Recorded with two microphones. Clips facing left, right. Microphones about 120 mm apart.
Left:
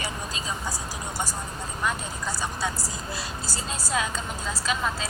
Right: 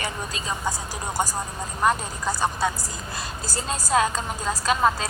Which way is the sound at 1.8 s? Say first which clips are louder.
Right 7 dB; 50° right (ahead or behind).